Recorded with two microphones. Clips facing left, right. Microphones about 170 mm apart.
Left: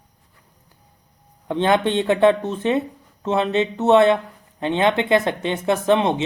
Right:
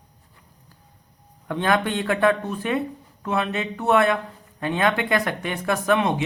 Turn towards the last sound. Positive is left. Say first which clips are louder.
# left 3 dB
turn(degrees=25)  # may be behind; listen again after turning